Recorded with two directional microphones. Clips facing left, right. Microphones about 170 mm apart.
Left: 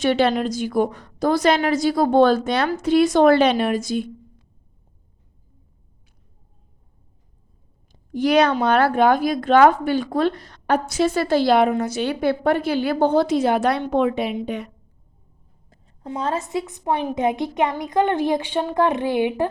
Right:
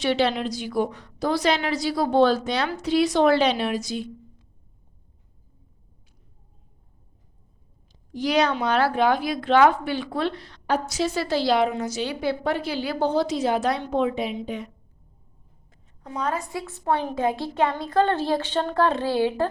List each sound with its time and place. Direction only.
0.0 s a woman's voice: 50° left (ahead or behind)
7.9 s speech: 55° left (ahead or behind)
16.0 s a woman's voice: 25° left (ahead or behind)